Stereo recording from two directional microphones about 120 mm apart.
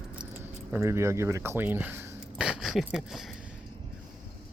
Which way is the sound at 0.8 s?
25° right (ahead or behind).